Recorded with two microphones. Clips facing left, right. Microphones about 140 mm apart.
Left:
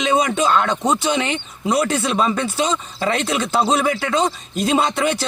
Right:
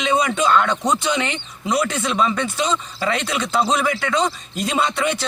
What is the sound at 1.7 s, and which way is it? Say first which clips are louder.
Speech: left 2 dB; 35° left (ahead or behind).